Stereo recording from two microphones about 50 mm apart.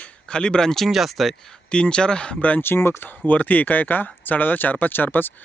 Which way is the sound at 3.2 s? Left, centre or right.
Left.